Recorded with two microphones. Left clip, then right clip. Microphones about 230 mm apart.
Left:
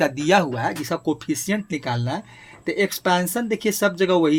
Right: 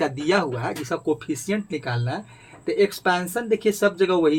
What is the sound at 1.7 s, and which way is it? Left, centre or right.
A woman's voice, left.